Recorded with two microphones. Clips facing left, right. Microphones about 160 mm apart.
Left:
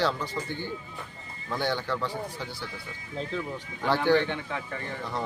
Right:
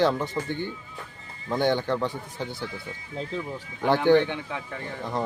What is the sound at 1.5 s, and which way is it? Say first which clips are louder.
Speech: right 5 dB; 20° right (ahead or behind).